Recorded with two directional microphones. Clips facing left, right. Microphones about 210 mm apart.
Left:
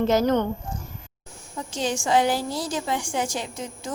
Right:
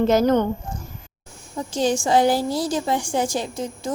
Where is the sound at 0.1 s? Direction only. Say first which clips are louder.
Right 2 dB; 50° right (ahead or behind).